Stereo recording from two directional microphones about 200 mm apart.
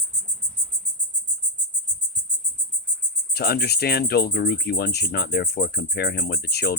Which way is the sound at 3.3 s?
50° left (ahead or behind).